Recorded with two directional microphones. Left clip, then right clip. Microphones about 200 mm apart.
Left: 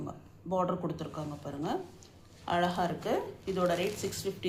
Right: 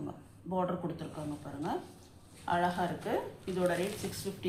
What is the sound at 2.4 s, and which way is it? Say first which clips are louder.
Speech: left 1 dB; 45° left (ahead or behind).